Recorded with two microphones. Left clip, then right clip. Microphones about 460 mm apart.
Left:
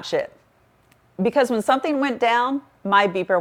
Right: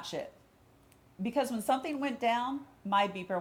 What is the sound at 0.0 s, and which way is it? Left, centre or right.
A woman's voice, left.